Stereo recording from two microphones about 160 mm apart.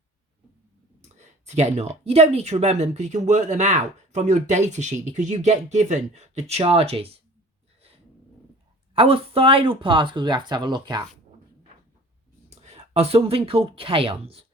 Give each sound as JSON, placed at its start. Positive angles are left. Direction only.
{"t": 1.0, "sound": "speech", "side_deg": -45}
{"t": 9.0, "sound": "speech", "side_deg": -35}
{"t": 12.5, "sound": "speech", "side_deg": -40}